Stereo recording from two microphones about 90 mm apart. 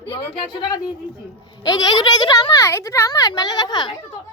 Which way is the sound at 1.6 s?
50° left (ahead or behind).